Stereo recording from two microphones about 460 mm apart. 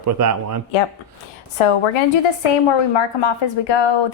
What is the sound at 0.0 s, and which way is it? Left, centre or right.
Speech, right.